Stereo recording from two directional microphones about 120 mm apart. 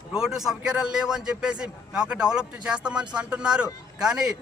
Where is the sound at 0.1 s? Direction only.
5° right (ahead or behind).